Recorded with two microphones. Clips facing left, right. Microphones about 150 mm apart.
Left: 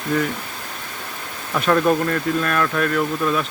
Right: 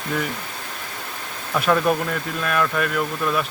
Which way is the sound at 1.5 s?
Centre (ahead or behind).